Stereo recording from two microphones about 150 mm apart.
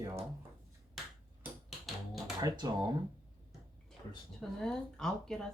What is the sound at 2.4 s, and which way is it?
Speech, 25° right (ahead or behind).